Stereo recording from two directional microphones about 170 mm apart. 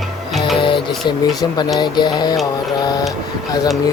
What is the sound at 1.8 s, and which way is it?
Speech, 25° left (ahead or behind).